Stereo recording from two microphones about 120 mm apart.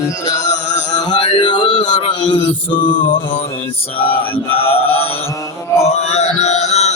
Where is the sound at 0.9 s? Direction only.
35° left (ahead or behind).